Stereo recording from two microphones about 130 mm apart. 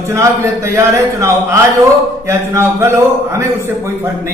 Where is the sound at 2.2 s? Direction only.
20° right (ahead or behind).